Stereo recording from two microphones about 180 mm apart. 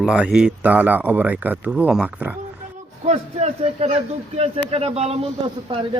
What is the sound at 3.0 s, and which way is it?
A man's voice, 40° right (ahead or behind).